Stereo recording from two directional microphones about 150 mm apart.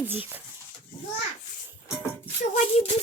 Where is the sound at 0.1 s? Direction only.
10° right (ahead or behind).